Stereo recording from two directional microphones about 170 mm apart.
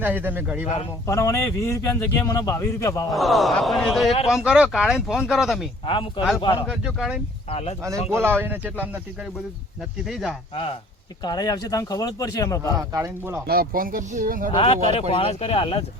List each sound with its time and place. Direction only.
0.0 s speech: 10° right (ahead or behind)
1.0 s speech: 20° left (ahead or behind)
3.1 s speech: centre (ahead or behind)
5.8 s speech: 30° left (ahead or behind)
6.7 s speech: 5° right (ahead or behind)
7.5 s speech: 35° left (ahead or behind)
8.1 s speech: 15° right (ahead or behind)
10.1 s speech: centre (ahead or behind)
11.2 s speech: 25° left (ahead or behind)
12.7 s speech: 20° right (ahead or behind)
13.5 s speech: 60° right (ahead or behind)
14.5 s speech: 35° left (ahead or behind)